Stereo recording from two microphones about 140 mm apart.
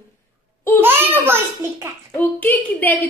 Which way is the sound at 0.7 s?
15° right (ahead or behind).